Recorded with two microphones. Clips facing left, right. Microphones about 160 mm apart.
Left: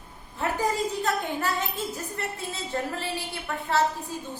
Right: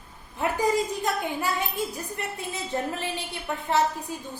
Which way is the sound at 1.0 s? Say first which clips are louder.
Even; 10° right (ahead or behind).